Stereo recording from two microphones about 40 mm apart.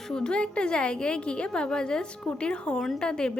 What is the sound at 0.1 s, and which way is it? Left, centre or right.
A woman's voice, left.